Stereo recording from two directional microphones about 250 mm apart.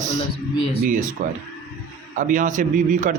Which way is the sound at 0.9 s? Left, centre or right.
Right.